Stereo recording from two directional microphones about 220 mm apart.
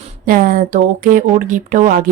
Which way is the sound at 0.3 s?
40° right (ahead or behind).